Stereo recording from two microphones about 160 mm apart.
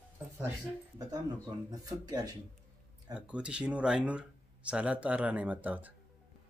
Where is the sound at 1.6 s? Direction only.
25° right (ahead or behind).